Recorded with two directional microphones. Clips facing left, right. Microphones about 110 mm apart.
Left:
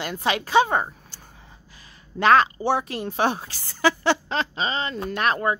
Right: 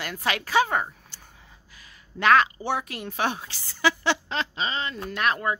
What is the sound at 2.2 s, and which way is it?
A woman's voice, 30° left (ahead or behind).